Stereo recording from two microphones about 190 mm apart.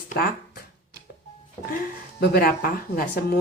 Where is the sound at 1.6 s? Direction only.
50° left (ahead or behind).